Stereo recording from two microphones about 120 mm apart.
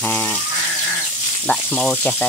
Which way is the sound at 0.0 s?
10° left (ahead or behind).